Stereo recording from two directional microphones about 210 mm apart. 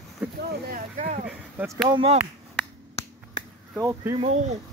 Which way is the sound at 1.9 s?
25° right (ahead or behind).